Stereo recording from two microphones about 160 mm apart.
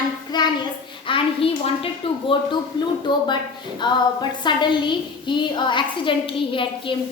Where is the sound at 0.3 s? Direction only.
25° left (ahead or behind).